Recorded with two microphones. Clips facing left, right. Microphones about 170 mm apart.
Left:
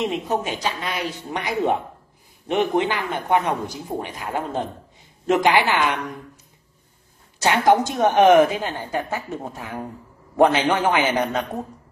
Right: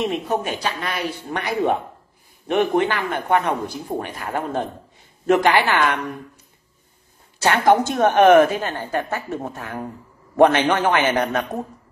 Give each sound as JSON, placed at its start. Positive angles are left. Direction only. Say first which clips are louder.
{"t": 0.0, "sound": "a woman's voice", "louder": "right 1 dB", "side_deg": 15}
{"t": 7.4, "sound": "a woman's voice", "louder": "right 1 dB", "side_deg": 15}